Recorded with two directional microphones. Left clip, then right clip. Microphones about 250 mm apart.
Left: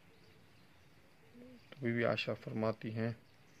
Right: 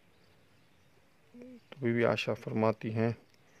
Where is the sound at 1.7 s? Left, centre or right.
Right.